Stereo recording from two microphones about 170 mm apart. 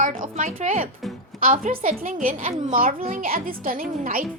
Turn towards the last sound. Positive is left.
turn(degrees=-55)  # may be behind; listen again after turning